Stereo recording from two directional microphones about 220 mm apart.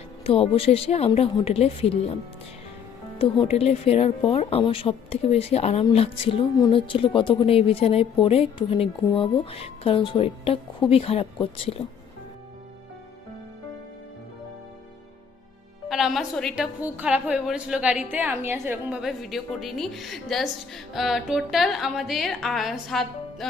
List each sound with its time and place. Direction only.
0.2 s speech: 25° left (ahead or behind)
3.2 s speech: 25° left (ahead or behind)
15.9 s a woman's voice: centre (ahead or behind)